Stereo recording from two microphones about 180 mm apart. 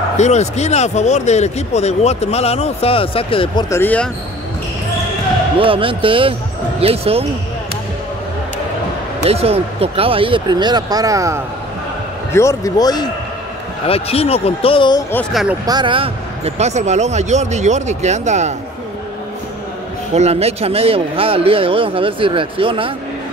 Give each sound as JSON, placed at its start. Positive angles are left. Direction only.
{"t": 0.2, "sound": "speech", "side_deg": 40}
{"t": 3.7, "sound": "speech", "side_deg": 10}
{"t": 5.6, "sound": "speech", "side_deg": -30}
{"t": 9.2, "sound": "speech", "side_deg": -35}
{"t": 12.3, "sound": "speech", "side_deg": 15}
{"t": 13.8, "sound": "speech", "side_deg": 35}
{"t": 15.6, "sound": "speech", "side_deg": -25}
{"t": 20.2, "sound": "speech", "side_deg": -35}